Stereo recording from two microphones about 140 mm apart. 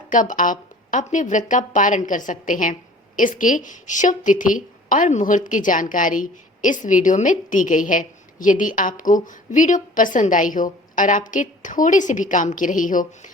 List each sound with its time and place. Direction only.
0.1 s a woman's voice: 70° left (ahead or behind)